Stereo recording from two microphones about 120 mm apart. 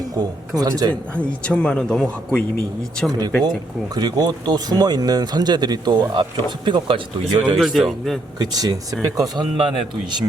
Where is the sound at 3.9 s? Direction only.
35° right (ahead or behind).